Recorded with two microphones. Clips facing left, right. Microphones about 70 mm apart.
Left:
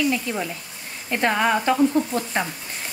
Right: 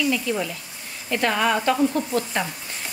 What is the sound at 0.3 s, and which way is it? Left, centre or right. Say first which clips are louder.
Speech: right 2 dB; left.